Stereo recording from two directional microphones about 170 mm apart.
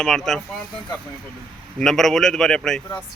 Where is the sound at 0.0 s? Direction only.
Centre (ahead or behind).